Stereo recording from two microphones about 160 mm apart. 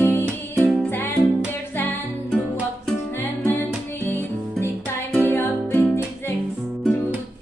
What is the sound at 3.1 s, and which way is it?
Music, 15° left (ahead or behind).